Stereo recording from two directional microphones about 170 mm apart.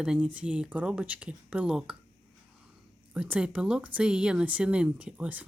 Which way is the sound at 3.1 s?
5° right (ahead or behind).